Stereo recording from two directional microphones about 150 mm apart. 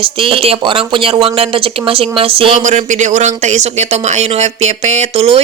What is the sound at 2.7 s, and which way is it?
Speech, 55° right (ahead or behind).